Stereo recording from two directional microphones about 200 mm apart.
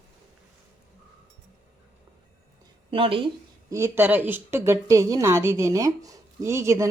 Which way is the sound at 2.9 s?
25° right (ahead or behind).